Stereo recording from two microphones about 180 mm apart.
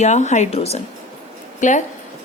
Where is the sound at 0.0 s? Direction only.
40° left (ahead or behind).